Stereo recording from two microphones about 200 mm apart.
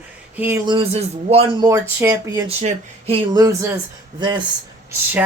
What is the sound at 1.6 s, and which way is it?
Speech, 15° right (ahead or behind).